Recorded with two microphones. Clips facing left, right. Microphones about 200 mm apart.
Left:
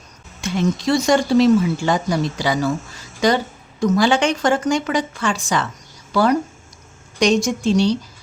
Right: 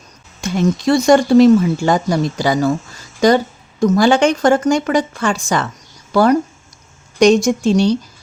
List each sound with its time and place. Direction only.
0.4 s a woman's voice: 45° right (ahead or behind)
7.2 s a woman's voice: 45° right (ahead or behind)